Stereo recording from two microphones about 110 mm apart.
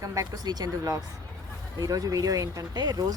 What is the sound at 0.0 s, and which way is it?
Speech, 30° right (ahead or behind).